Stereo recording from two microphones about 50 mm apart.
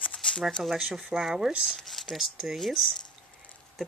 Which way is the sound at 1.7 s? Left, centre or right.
Centre.